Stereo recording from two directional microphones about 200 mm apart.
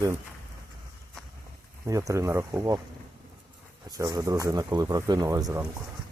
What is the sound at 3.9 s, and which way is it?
Speech, 15° right (ahead or behind).